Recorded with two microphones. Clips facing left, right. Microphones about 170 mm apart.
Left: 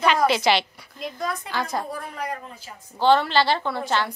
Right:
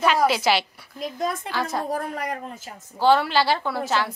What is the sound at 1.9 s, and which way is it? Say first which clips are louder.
Speech: right 5 dB; 45° right (ahead or behind).